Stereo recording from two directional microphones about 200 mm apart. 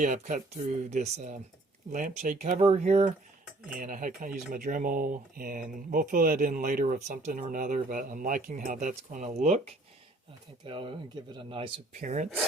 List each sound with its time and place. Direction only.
0.0 s speech: 40° right (ahead or behind)
11.9 s speech: 35° right (ahead or behind)